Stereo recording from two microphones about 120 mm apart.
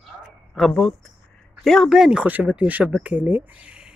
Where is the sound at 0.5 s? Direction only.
Centre (ahead or behind).